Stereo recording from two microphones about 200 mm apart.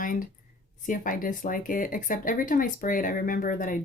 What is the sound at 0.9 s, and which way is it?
Speech, 40° left (ahead or behind).